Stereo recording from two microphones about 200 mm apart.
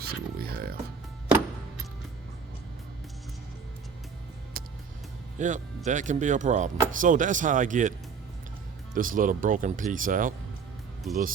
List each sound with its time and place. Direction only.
0.0 s music: 50° right (ahead or behind)
4.6 s music: 45° right (ahead or behind)
5.4 s speech: 35° right (ahead or behind)
9.0 s speech: 40° right (ahead or behind)